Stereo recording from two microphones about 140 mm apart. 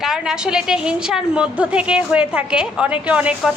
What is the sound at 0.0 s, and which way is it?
A woman's voice, 5° right (ahead or behind).